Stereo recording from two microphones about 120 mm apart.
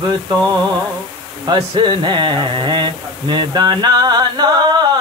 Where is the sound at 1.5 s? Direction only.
40° right (ahead or behind).